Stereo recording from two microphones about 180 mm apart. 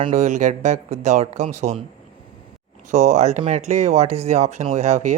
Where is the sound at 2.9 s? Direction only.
40° right (ahead or behind).